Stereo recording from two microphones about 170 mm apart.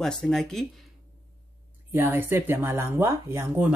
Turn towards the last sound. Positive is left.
turn(degrees=-15)  # may be behind; listen again after turning